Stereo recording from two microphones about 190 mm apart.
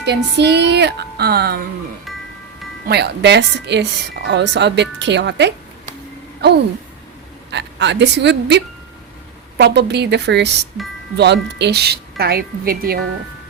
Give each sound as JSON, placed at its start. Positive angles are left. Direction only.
{"t": 0.0, "sound": "speech", "side_deg": -60}
{"t": 2.8, "sound": "speech", "side_deg": -60}
{"t": 7.5, "sound": "speech", "side_deg": -65}